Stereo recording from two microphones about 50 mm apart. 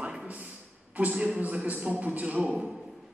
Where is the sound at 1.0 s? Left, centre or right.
Right.